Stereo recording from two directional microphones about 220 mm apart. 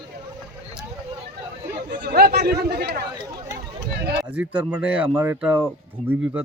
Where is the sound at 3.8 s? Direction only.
50° right (ahead or behind).